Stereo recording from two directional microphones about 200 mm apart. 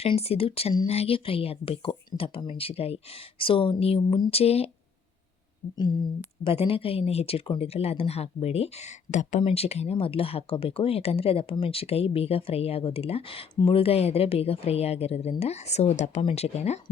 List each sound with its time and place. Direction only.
0.0 s speech: 30° left (ahead or behind)
5.7 s speech: 20° left (ahead or behind)